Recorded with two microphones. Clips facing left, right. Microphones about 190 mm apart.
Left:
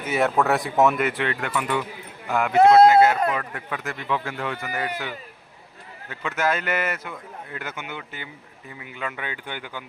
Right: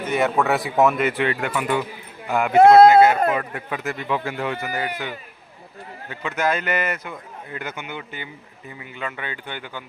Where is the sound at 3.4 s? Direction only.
20° right (ahead or behind).